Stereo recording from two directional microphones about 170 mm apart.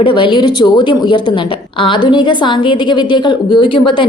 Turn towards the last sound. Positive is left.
turn(degrees=30)  # may be behind; listen again after turning